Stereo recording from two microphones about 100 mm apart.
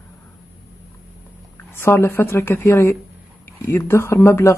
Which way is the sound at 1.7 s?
25° left (ahead or behind).